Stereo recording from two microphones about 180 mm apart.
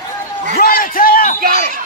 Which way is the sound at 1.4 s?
55° right (ahead or behind).